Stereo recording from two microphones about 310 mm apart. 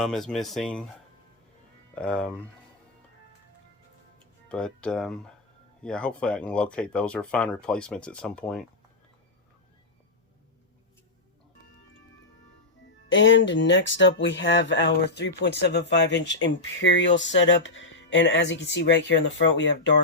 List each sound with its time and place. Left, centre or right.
0.0 s speech: centre
2.0 s speech: centre
4.4 s speech: centre
13.1 s speech: left